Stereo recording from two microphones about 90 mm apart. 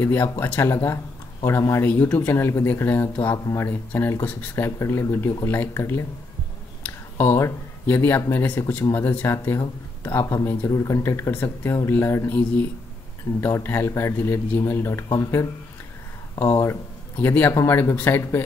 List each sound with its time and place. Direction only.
0.0 s speech: 20° left (ahead or behind)
1.9 s speech: 20° left (ahead or behind)
4.6 s speech: 30° left (ahead or behind)
6.8 s a sound: 20° left (ahead or behind)
7.8 s speech: 25° left (ahead or behind)
13.4 s speech: 25° left (ahead or behind)
16.4 s speech: 40° left (ahead or behind)
17.2 s speech: 20° left (ahead or behind)